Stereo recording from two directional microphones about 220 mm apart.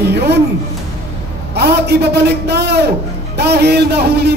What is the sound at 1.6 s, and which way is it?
A man's voice, 50° right (ahead or behind).